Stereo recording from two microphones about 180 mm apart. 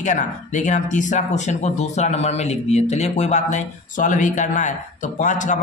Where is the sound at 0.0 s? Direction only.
45° left (ahead or behind).